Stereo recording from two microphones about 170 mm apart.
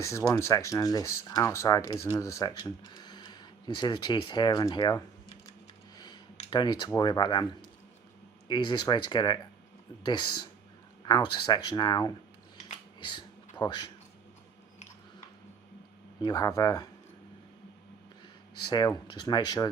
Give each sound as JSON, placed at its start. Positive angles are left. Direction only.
{"t": 0.0, "sound": "speech", "side_deg": 20}
{"t": 6.5, "sound": "speech", "side_deg": 25}
{"t": 13.0, "sound": "a sound", "side_deg": 25}
{"t": 16.2, "sound": "speech", "side_deg": 20}
{"t": 18.7, "sound": "speech", "side_deg": 25}